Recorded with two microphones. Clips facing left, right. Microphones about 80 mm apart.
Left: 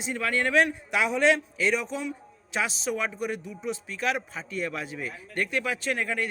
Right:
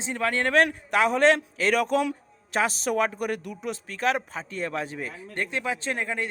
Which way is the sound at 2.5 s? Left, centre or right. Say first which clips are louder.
Right 4 dB; right.